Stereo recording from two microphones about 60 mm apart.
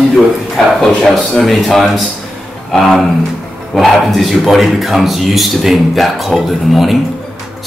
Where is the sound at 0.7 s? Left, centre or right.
Centre.